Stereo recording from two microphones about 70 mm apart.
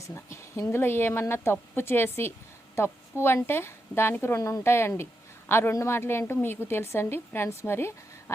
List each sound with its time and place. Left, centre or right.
0.0 s a woman's voice: left
4.4 s speech: left
4.6 s a woman's voice: left